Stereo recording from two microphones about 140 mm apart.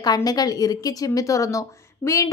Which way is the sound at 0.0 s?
25° left (ahead or behind).